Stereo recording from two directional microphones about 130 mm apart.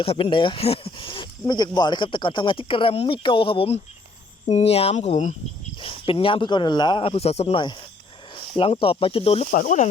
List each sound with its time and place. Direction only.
0.0 s speech: 45° left (ahead or behind)
4.4 s speech: 55° left (ahead or behind)
5.8 s speech: 45° left (ahead or behind)
7.0 s speech: 50° left (ahead or behind)
9.5 s speech: 85° left